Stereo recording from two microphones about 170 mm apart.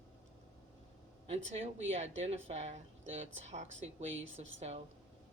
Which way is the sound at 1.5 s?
40° right (ahead or behind).